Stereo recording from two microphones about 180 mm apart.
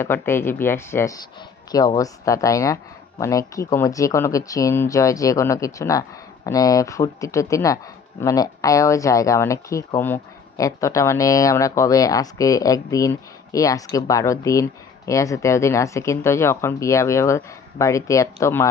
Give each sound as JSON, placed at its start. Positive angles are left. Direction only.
{"t": 0.0, "sound": "speech", "side_deg": 15}